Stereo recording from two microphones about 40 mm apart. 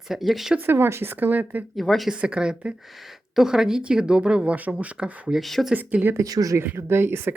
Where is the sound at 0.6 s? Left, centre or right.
Right.